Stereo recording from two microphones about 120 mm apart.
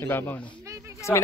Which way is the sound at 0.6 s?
25° right (ahead or behind).